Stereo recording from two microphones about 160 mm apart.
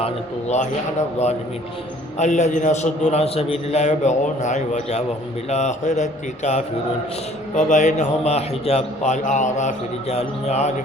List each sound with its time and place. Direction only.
0.0 s a man's voice: 45° left (ahead or behind)
2.1 s a man's voice: 45° left (ahead or behind)